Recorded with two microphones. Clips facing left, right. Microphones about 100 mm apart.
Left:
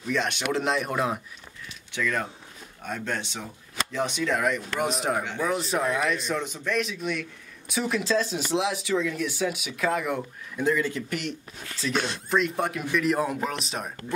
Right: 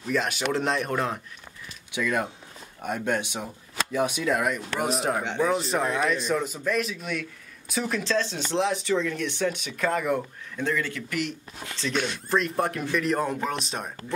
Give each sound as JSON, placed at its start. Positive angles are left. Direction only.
{"t": 0.1, "sound": "speech", "side_deg": -5}
{"t": 1.9, "sound": "speech", "side_deg": -10}
{"t": 5.2, "sound": "speech", "side_deg": -20}
{"t": 5.5, "sound": "speech", "side_deg": 0}
{"t": 10.6, "sound": "speech", "side_deg": 15}
{"t": 11.1, "sound": "speech", "side_deg": 45}
{"t": 11.9, "sound": "speech", "side_deg": 35}
{"t": 12.3, "sound": "speech", "side_deg": 0}